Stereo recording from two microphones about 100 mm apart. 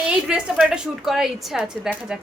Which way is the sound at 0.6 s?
10° right (ahead or behind).